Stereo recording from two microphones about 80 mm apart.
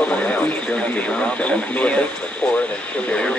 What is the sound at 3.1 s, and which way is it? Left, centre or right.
Speech, centre.